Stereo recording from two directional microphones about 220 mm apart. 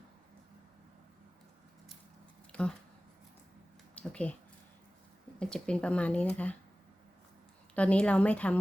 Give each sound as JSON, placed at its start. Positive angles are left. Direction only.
{"t": 2.5, "sound": "a sound", "side_deg": 5}
{"t": 3.9, "sound": "speech", "side_deg": 5}
{"t": 5.4, "sound": "speech", "side_deg": 5}
{"t": 7.8, "sound": "speech", "side_deg": 5}